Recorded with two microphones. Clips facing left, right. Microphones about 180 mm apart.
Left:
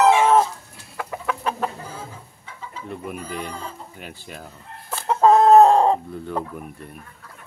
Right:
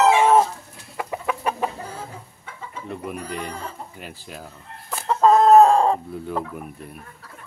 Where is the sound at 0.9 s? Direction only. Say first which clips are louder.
Right 1 dB; 10° right (ahead or behind).